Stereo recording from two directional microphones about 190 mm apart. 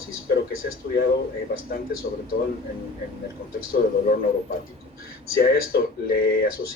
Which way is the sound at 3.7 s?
55° left (ahead or behind).